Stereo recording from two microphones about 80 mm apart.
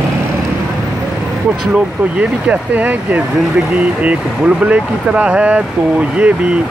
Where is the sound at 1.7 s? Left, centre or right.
Centre.